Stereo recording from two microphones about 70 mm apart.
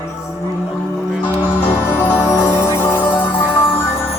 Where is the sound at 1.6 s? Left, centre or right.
Left.